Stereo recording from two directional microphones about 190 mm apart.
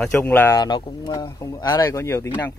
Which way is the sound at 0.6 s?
25° left (ahead or behind).